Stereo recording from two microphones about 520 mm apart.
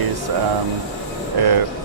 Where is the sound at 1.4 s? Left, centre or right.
Right.